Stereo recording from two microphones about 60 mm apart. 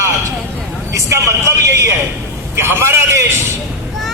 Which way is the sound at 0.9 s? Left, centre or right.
Right.